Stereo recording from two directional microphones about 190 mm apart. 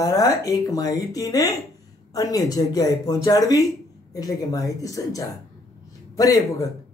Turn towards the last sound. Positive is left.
turn(degrees=20)  # may be behind; listen again after turning